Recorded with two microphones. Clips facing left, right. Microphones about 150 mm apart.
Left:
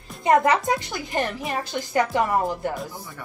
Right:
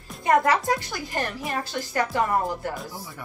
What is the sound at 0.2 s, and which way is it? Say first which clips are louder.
A woman's voice: left 2 dB; 20° left (ahead or behind).